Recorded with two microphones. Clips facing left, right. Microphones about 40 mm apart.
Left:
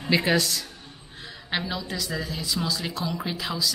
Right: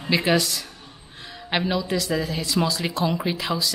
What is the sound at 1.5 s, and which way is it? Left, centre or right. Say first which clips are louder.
A woman's voice: right 6 dB; centre.